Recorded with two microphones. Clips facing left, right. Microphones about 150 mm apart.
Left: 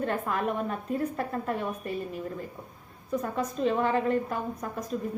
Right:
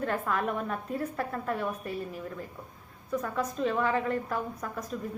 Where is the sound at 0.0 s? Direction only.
25° left (ahead or behind).